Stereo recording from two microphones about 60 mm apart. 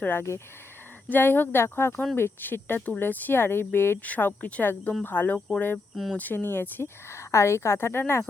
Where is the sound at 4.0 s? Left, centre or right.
Left.